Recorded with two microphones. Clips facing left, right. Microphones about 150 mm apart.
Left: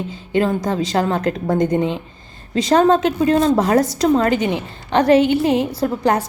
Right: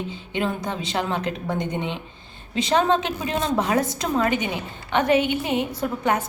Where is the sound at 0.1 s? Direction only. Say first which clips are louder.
Left 8 dB; 40° left (ahead or behind).